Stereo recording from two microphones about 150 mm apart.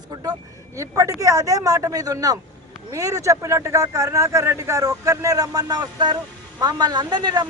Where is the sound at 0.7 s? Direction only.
20° right (ahead or behind).